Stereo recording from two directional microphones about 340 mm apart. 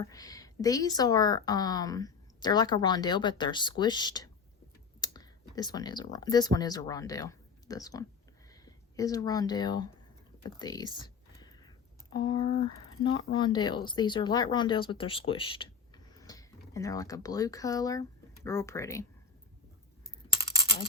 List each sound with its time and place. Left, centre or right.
0.0 s a woman's voice: centre
11.0 s a sound: centre
12.1 s a woman's voice: centre
20.3 s computer keyboard: centre